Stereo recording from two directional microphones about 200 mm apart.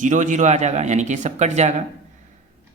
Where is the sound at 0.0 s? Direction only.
40° right (ahead or behind).